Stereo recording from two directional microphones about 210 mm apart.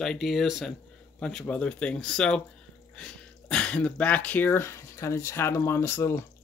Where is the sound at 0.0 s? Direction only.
Centre (ahead or behind).